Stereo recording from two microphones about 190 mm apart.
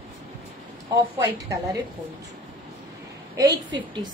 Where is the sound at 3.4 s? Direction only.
20° right (ahead or behind).